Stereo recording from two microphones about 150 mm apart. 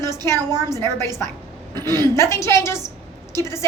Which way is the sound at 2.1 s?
20° left (ahead or behind).